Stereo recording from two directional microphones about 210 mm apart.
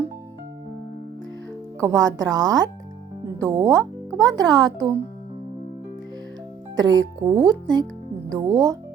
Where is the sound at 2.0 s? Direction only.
60° right (ahead or behind).